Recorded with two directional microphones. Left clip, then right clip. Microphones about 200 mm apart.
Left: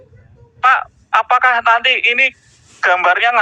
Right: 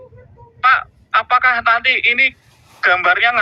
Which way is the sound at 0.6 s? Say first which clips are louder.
Left 1 dB; 45° left (ahead or behind).